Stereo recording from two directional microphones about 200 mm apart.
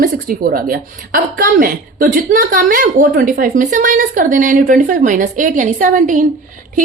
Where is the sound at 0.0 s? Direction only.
45° right (ahead or behind).